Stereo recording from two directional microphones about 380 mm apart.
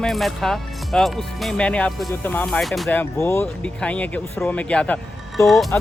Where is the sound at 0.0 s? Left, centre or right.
Centre.